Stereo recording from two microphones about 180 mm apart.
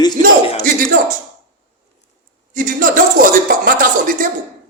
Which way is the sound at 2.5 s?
50° right (ahead or behind).